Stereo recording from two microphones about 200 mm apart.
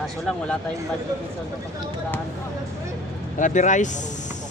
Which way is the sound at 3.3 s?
40° left (ahead or behind).